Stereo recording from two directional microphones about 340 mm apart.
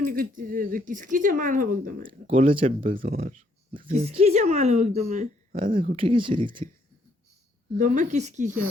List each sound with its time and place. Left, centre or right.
0.0 s speech: right
7.8 s speech: right